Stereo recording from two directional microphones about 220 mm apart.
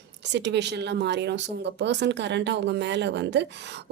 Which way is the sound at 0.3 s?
50° right (ahead or behind).